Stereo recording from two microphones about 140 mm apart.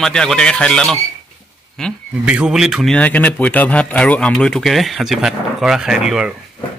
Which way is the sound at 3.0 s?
10° left (ahead or behind).